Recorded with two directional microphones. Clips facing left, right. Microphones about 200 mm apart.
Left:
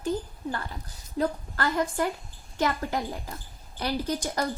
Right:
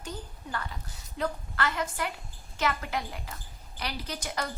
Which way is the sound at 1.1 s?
40° left (ahead or behind).